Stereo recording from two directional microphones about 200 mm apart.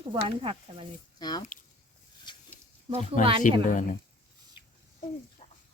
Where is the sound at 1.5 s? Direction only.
40° left (ahead or behind).